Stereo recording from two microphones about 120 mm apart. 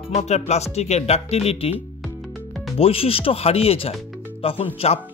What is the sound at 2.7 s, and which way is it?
Speech, 55° left (ahead or behind).